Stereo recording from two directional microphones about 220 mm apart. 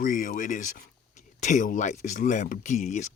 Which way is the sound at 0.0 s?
40° left (ahead or behind).